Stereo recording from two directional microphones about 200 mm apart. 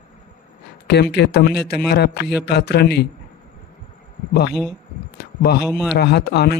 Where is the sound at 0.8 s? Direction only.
55° left (ahead or behind).